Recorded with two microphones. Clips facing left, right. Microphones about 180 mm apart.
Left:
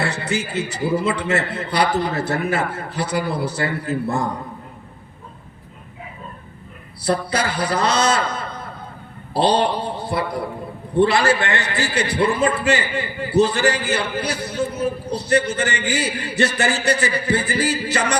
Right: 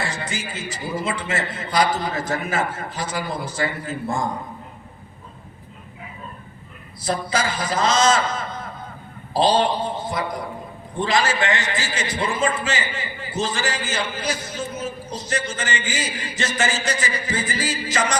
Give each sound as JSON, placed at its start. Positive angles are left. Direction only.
{"t": 0.0, "sound": "a man's voice", "side_deg": 65}
{"t": 7.0, "sound": "a man's voice", "side_deg": 65}